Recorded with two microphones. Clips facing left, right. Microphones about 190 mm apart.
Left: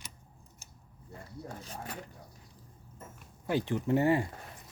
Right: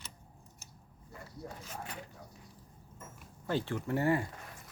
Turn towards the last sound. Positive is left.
turn(degrees=20)  # may be behind; listen again after turning